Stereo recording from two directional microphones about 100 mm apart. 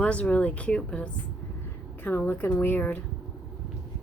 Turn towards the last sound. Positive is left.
turn(degrees=20)  # may be behind; listen again after turning